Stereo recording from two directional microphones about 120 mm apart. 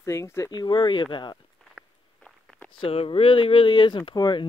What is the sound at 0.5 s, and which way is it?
Speech, 40° left (ahead or behind).